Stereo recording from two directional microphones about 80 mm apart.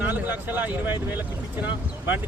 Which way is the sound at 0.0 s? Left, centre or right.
Right.